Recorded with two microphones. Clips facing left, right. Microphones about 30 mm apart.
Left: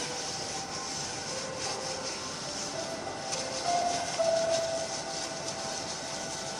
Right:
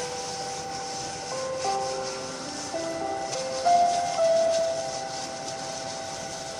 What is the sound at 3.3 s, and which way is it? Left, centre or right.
Music, centre.